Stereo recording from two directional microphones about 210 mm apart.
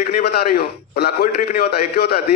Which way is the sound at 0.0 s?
50° left (ahead or behind).